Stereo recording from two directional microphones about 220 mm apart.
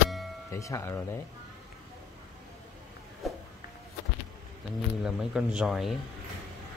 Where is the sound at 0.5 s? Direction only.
15° left (ahead or behind).